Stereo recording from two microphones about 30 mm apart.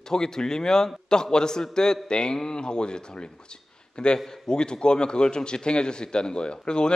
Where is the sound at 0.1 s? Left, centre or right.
Left.